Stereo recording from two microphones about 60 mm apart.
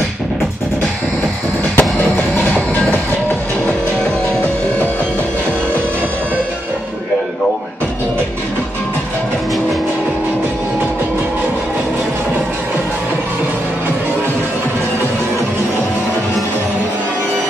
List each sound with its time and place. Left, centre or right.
1.8 s train: left